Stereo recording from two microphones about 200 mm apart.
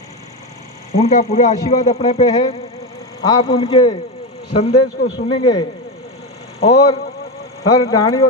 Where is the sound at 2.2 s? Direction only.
20° left (ahead or behind).